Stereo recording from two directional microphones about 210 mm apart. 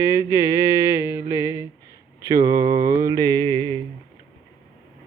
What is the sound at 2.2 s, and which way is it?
Mantra, 15° right (ahead or behind).